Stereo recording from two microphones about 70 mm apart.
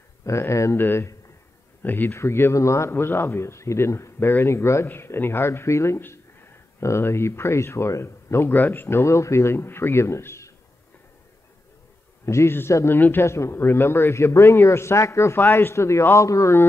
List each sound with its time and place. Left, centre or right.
0.2 s a man's voice: left
8.5 s a man's voice: left
12.3 s a man's voice: left